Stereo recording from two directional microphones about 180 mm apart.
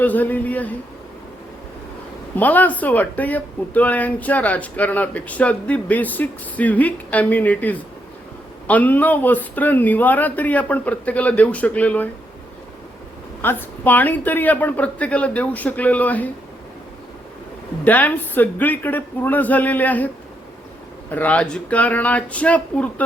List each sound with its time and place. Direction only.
0.0 s speech: 10° left (ahead or behind)
2.3 s speech: 10° left (ahead or behind)
13.4 s speech: 10° left (ahead or behind)
17.8 s speech: 10° left (ahead or behind)
21.1 s speech: 10° left (ahead or behind)